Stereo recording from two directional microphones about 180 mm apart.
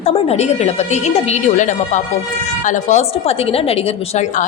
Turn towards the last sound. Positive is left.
turn(degrees=35)  # may be behind; listen again after turning